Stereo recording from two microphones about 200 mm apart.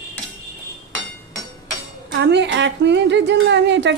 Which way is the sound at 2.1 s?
60° right (ahead or behind).